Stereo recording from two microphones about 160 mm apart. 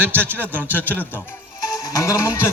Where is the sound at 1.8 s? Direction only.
20° left (ahead or behind).